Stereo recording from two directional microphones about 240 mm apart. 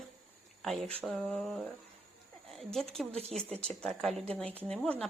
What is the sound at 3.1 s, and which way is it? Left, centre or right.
Speech, right.